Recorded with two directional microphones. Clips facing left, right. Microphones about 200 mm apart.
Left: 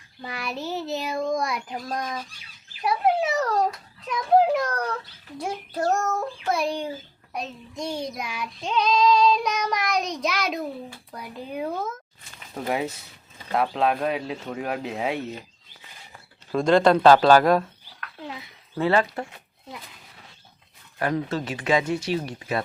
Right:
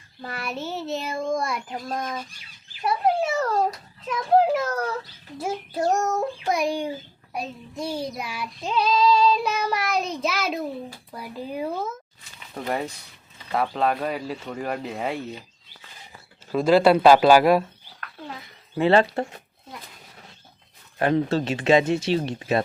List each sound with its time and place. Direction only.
0.2 s child singing: centre (ahead or behind)
5.4 s a child's voice: 10° right (ahead or behind)
7.3 s child singing: 5° right (ahead or behind)
16.5 s a child's voice: 5° right (ahead or behind)
18.8 s speech: 25° right (ahead or behind)
21.0 s speech: 25° right (ahead or behind)